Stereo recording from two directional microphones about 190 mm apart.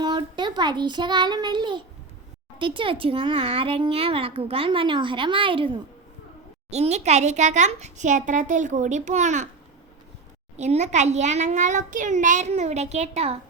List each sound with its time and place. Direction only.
0.0 s child singing: 25° right (ahead or behind)
2.6 s a child's voice: 25° right (ahead or behind)
10.6 s a child's voice: 35° right (ahead or behind)